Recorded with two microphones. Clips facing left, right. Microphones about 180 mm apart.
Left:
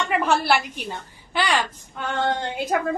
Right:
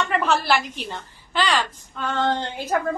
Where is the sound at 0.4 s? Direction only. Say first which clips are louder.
Left 1 dB; 55° left (ahead or behind).